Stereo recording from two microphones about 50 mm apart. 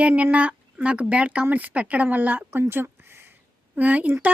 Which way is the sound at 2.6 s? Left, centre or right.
Right.